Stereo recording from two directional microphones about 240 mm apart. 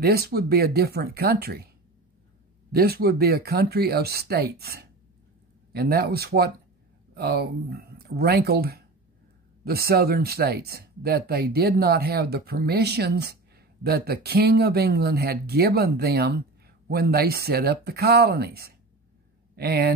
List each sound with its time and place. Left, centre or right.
0.0 s speech: right
2.7 s speech: right